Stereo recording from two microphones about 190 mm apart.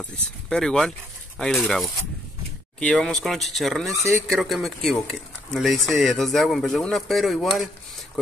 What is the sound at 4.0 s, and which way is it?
Speech, 15° right (ahead or behind).